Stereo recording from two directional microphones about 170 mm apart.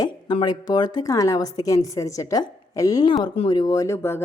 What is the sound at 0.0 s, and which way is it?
Speech, 25° left (ahead or behind).